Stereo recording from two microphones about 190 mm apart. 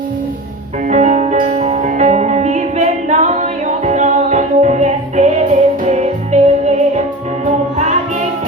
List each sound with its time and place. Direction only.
0.9 s music: 40° right (ahead or behind)
7.4 s music: 40° right (ahead or behind)